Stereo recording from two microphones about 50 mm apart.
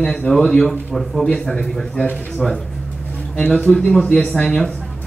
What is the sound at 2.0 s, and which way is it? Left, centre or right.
A man's voice, left.